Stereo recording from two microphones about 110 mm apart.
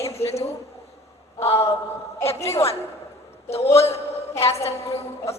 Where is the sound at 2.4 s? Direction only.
25° left (ahead or behind).